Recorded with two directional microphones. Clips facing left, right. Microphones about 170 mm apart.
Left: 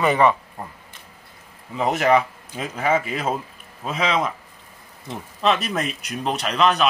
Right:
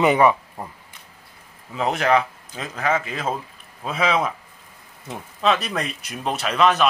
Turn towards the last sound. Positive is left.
turn(degrees=0)  # may be behind; listen again after turning